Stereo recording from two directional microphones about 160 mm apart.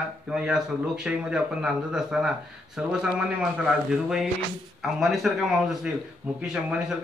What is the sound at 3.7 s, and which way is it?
Speech, 5° right (ahead or behind).